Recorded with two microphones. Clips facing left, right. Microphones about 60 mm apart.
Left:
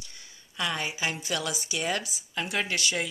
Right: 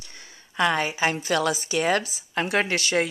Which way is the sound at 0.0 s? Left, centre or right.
Right.